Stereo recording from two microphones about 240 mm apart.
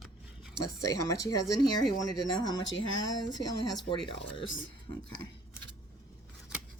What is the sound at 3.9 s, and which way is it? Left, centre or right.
Speech, left.